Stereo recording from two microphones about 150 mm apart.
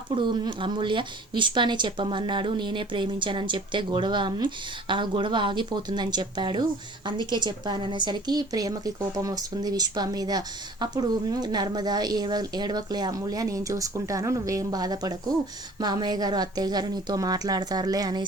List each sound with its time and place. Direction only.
0.1 s speech: 30° right (ahead or behind)